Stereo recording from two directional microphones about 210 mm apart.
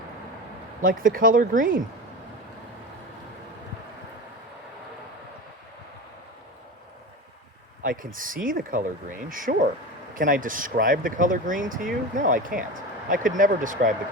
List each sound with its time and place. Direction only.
0.8 s speech: 40° right (ahead or behind)
7.9 s speech: 40° right (ahead or behind)